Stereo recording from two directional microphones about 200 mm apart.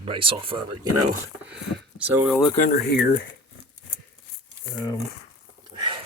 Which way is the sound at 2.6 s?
50° left (ahead or behind).